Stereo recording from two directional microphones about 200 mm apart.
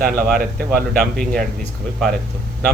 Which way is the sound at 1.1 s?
5° left (ahead or behind).